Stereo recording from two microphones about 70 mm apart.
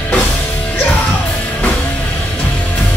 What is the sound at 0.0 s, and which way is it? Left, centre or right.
Music, left.